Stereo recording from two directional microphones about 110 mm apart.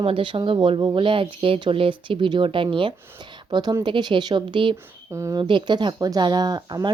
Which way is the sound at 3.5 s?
40° right (ahead or behind).